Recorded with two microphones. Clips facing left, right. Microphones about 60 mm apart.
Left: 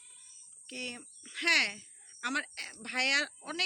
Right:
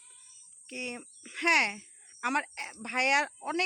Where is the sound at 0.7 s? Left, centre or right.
Right.